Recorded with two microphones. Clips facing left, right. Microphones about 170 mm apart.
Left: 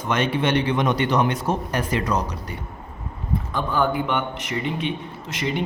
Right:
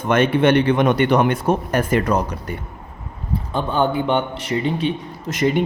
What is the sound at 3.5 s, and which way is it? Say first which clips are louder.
A man's voice: right 3 dB; 25° right (ahead or behind).